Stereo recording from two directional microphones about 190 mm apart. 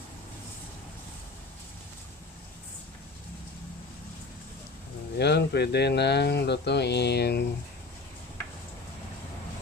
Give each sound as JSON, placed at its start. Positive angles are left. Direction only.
{"t": 5.2, "sound": "speech", "side_deg": 60}